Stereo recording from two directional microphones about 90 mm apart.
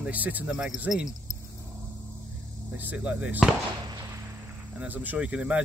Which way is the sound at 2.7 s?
15° right (ahead or behind).